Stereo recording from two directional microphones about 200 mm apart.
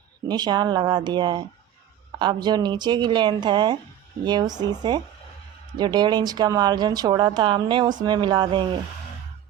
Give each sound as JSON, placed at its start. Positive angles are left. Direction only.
{"t": 0.3, "sound": "speech", "side_deg": -20}